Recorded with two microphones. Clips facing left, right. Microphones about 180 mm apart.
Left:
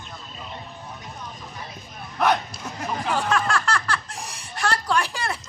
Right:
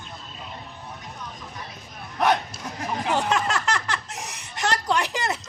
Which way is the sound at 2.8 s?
20° right (ahead or behind).